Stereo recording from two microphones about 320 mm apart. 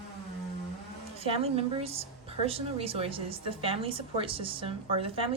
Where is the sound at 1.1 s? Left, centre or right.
Centre.